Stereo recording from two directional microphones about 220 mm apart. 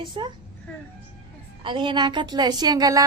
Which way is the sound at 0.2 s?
20° right (ahead or behind).